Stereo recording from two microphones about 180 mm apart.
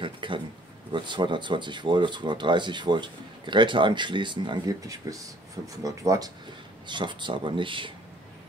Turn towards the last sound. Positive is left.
turn(degrees=-30)  # may be behind; listen again after turning